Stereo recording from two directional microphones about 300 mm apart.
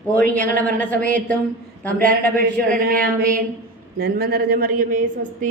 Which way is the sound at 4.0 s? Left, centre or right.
Right.